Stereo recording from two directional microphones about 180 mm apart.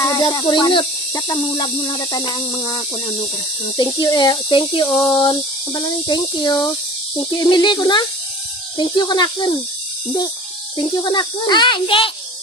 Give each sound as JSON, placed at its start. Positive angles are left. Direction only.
{"t": 0.0, "sound": "speech", "side_deg": 20}
{"t": 10.9, "sound": "speech", "side_deg": 25}